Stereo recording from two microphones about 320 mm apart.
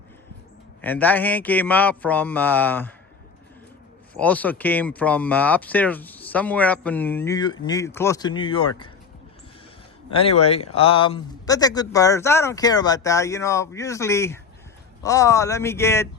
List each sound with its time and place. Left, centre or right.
0.8 s speech: centre
4.1 s speech: centre
10.1 s speech: centre